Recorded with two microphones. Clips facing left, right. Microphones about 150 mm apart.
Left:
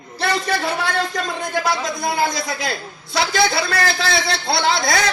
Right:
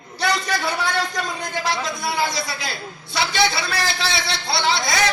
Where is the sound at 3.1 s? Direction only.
50° left (ahead or behind).